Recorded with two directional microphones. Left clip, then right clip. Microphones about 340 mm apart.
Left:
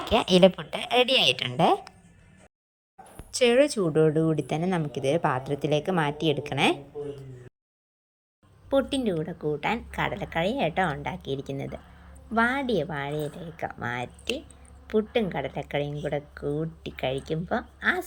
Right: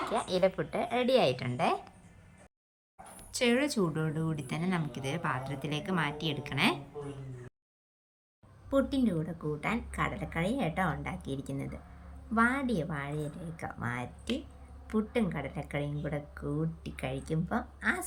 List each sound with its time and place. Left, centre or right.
0.1 s speech: left
3.3 s speech: centre
8.7 s a woman's voice: centre